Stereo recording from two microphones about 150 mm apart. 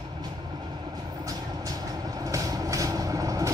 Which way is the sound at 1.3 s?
25° right (ahead or behind).